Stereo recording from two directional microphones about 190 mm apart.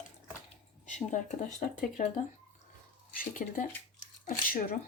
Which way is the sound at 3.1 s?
45° left (ahead or behind).